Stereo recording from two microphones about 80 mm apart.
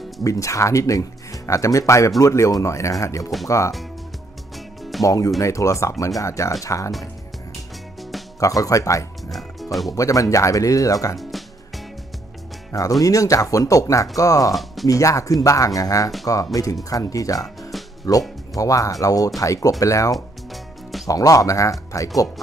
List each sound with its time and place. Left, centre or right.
0.2 s speech: left
5.0 s speech: left
8.4 s speech: left
9.3 s music: centre
9.9 s speech: left
11.1 s music: centre
13.0 s speech: left
14.5 s speech: centre
14.9 s speech: left